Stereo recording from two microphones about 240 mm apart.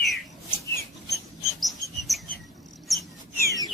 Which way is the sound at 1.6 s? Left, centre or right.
Centre.